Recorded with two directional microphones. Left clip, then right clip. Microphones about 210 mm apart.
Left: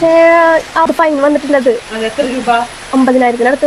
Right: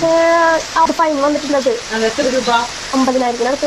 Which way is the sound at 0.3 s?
50° left (ahead or behind).